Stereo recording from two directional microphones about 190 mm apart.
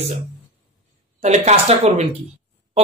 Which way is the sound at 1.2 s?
35° right (ahead or behind).